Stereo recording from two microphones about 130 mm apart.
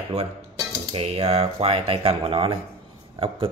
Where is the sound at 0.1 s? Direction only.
55° right (ahead or behind).